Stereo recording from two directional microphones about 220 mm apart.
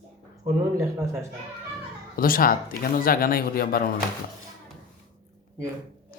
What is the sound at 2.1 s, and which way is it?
Speech, 40° left (ahead or behind).